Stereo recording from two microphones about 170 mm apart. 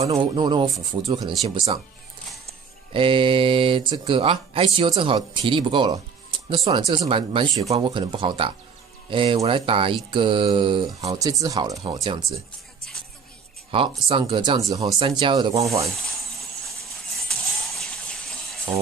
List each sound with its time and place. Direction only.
0.0 s speech: 30° right (ahead or behind)
1.4 s mantra: 30° right (ahead or behind)
2.4 s speech: 30° right (ahead or behind)
9.1 s mantra: 30° right (ahead or behind)
11.1 s speech: 20° right (ahead or behind)
13.7 s mantra: 30° right (ahead or behind)
14.0 s speech: 30° right (ahead or behind)
17.2 s music: centre (ahead or behind)